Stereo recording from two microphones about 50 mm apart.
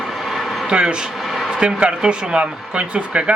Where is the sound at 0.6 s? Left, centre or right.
Centre.